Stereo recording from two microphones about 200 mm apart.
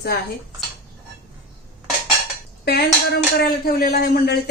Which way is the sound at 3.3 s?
50° left (ahead or behind).